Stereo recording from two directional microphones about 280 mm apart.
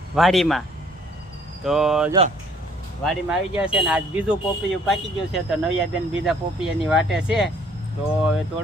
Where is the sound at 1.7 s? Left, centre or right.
Centre.